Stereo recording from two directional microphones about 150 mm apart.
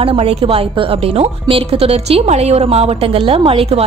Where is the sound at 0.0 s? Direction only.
40° right (ahead or behind).